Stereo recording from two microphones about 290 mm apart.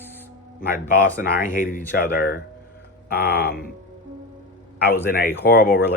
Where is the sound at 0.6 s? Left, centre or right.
Left.